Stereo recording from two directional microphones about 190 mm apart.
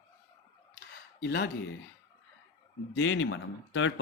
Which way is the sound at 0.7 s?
60° left (ahead or behind).